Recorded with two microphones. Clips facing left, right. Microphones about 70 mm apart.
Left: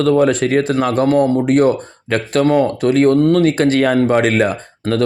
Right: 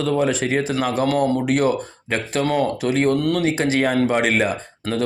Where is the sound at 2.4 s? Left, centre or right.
Left.